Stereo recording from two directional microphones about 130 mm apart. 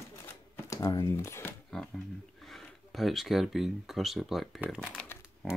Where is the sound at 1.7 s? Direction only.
5° left (ahead or behind).